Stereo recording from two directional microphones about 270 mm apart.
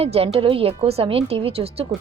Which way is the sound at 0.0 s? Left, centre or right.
Right.